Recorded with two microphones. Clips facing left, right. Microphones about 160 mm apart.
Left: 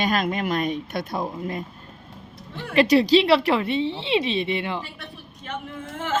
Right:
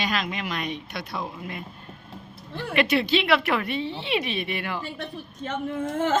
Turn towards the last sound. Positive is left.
turn(degrees=-40)  # may be behind; listen again after turning